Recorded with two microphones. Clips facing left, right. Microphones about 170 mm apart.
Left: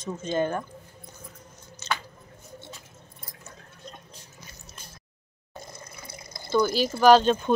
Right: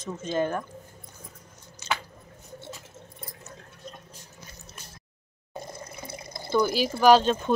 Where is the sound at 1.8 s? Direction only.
10° right (ahead or behind).